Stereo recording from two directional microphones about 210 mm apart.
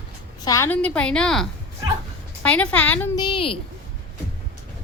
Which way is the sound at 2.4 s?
5° left (ahead or behind).